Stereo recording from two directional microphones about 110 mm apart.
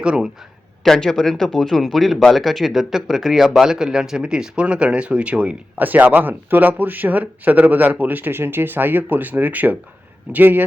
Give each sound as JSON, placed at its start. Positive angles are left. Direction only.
{"t": 0.0, "sound": "speech", "side_deg": -5}
{"t": 0.9, "sound": "speech", "side_deg": 5}